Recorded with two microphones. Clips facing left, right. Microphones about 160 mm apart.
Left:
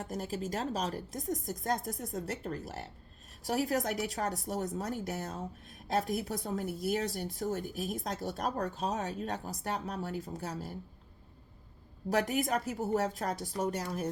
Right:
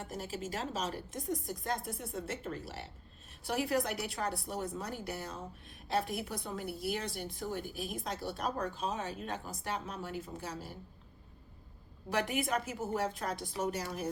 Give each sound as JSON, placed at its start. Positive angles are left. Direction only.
{"t": 0.1, "sound": "a woman's voice", "side_deg": 40}
{"t": 12.1, "sound": "a woman's voice", "side_deg": 40}